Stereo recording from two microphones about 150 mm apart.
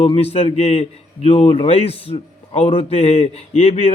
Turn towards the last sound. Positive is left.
turn(degrees=45)  # may be behind; listen again after turning